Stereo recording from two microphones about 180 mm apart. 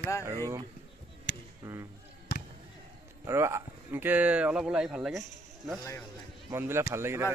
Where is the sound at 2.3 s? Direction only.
60° left (ahead or behind).